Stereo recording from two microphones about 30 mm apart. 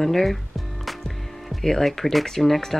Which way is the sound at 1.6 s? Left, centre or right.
Centre.